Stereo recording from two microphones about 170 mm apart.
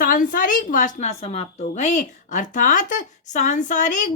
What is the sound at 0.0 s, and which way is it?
A woman's voice, 55° left (ahead or behind).